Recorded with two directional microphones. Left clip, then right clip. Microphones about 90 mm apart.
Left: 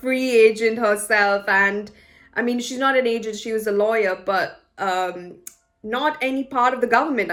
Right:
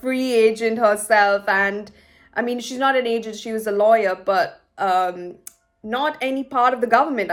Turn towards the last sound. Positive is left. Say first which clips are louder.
# right 1 dB
turn(degrees=-25)  # may be behind; listen again after turning